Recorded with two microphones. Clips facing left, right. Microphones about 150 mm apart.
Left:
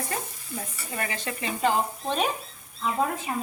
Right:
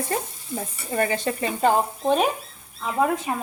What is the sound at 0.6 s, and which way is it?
Speech, 35° right (ahead or behind).